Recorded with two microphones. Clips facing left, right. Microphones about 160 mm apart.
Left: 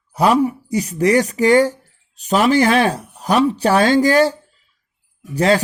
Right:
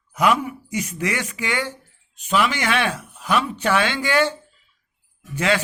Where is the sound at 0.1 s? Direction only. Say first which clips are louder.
Left 5 dB; 35° left (ahead or behind).